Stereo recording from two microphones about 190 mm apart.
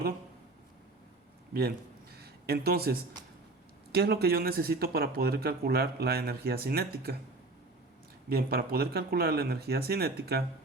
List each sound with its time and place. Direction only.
2.1 s a sound: 55° right (ahead or behind)
3.9 s speech: 55° right (ahead or behind)
8.3 s speech: 55° right (ahead or behind)